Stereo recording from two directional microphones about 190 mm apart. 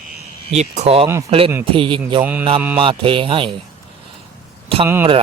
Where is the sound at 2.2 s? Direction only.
10° right (ahead or behind).